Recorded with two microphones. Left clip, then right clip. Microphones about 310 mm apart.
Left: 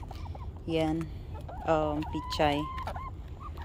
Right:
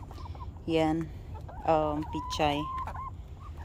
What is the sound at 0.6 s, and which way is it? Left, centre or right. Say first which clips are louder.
A woman's voice: right 2 dB; centre.